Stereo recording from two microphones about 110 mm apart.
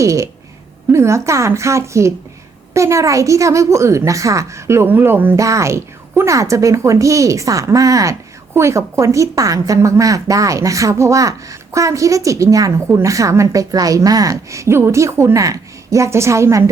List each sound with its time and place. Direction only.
0.0 s a woman's voice: 30° right (ahead or behind)